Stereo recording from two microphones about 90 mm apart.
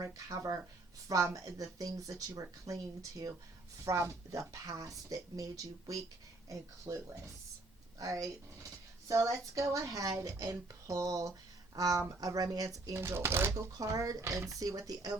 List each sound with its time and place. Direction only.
0.0 s speech: 35° right (ahead or behind)
6.5 s speech: 35° right (ahead or behind)
13.5 s speech: 40° right (ahead or behind)